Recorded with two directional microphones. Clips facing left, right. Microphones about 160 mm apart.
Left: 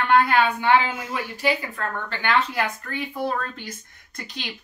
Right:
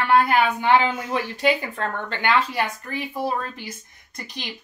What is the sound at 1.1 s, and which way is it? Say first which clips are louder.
Speech: right 2 dB; 20° right (ahead or behind).